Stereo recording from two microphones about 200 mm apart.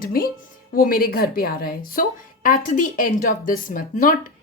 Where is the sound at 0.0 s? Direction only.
45° left (ahead or behind).